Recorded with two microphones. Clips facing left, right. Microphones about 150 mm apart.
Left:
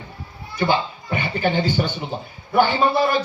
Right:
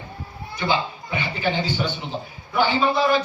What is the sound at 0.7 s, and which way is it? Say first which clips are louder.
A man's voice: left 1 dB; 50° left (ahead or behind).